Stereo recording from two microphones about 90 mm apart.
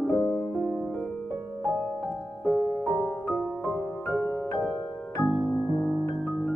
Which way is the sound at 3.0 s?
5° left (ahead or behind).